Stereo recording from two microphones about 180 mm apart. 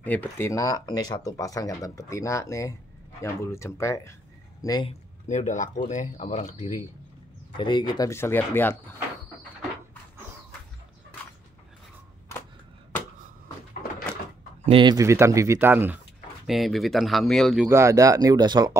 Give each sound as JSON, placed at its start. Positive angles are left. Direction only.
{"t": 0.0, "sound": "speech", "side_deg": 10}
{"t": 5.3, "sound": "speech", "side_deg": 45}
{"t": 7.5, "sound": "speech", "side_deg": 25}
{"t": 14.7, "sound": "speech", "side_deg": -25}
{"t": 16.4, "sound": "speech", "side_deg": 0}
{"t": 17.6, "sound": "speech", "side_deg": -15}